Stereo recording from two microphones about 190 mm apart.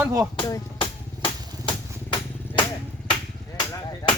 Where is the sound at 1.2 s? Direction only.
25° left (ahead or behind).